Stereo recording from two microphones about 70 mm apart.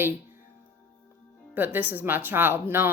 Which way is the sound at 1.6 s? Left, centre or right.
Right.